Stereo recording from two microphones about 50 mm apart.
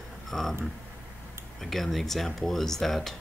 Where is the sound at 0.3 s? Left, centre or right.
Centre.